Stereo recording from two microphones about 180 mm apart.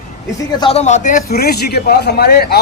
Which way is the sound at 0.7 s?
40° left (ahead or behind).